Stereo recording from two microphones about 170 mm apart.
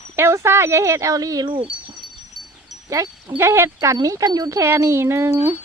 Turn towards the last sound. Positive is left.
turn(degrees=-15)  # may be behind; listen again after turning